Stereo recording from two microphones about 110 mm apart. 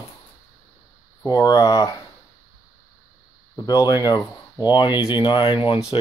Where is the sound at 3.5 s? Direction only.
35° left (ahead or behind).